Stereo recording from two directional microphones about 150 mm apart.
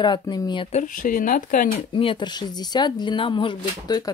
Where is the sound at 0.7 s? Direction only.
55° left (ahead or behind).